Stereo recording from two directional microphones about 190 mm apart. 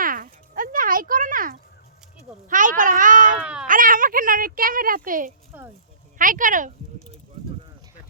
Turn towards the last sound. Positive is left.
turn(degrees=-45)  # may be behind; listen again after turning